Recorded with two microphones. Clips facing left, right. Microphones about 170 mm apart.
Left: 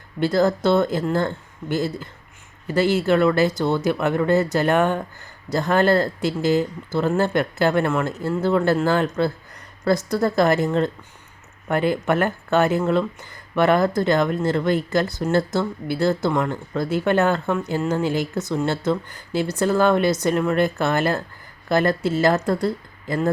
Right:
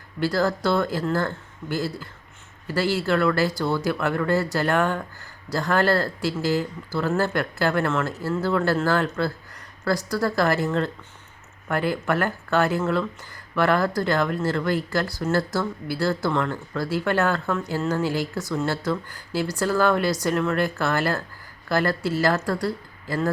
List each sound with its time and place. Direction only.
0.2 s speech: 20° left (ahead or behind)